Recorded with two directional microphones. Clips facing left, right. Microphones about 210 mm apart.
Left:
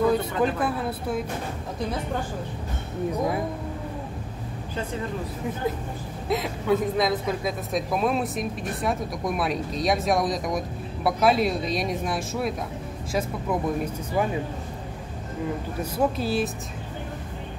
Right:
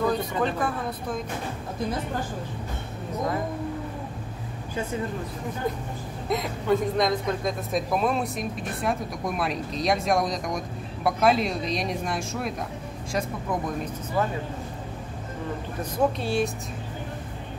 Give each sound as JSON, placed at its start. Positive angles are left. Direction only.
{"t": 0.1, "sound": "speech", "side_deg": 5}
{"t": 6.2, "sound": "speech", "side_deg": 0}
{"t": 15.8, "sound": "speech", "side_deg": 0}